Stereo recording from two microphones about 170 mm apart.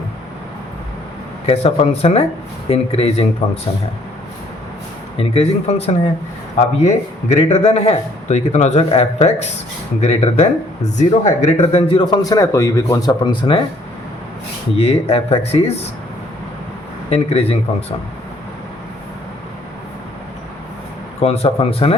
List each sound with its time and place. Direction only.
1.5 s speech: 35° left (ahead or behind)
5.1 s a man's voice: 35° left (ahead or behind)
15.0 s speech: 35° left (ahead or behind)
17.1 s speech: 35° left (ahead or behind)
21.2 s speech: 35° left (ahead or behind)